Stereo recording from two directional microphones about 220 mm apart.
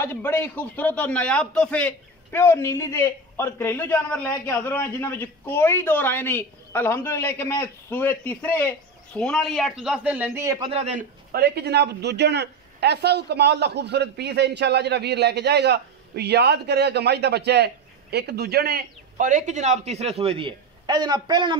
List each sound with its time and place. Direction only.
0.0 s a man's voice: 10° left (ahead or behind); by 10.7 s 15° right (ahead or behind)
10.7 s a man's voice: 30° right (ahead or behind)